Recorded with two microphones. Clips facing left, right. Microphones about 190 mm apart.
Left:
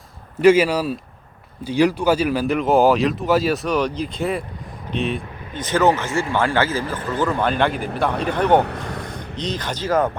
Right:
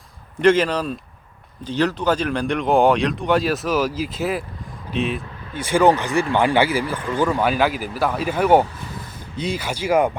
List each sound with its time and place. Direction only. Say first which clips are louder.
0.4 s speech: left 2 dB; 10° left (ahead or behind)
8.6 s vehicle: left 6 dB; 65° left (ahead or behind)
9.3 s speech: right 2 dB; 10° right (ahead or behind)